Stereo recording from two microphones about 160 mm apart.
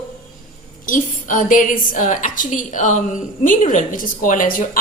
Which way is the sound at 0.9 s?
55° left (ahead or behind).